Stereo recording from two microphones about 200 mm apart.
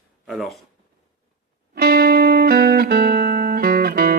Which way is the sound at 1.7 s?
50° right (ahead or behind).